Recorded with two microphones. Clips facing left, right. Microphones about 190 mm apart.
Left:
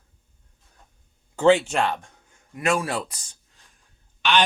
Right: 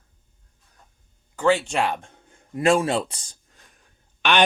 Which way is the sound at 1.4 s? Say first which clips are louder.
Left 3 dB; 20° left (ahead or behind).